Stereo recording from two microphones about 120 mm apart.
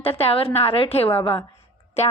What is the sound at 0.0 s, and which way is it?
A woman's voice, 55° left (ahead or behind).